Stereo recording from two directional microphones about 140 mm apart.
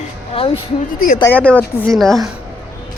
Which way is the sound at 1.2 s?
10° left (ahead or behind).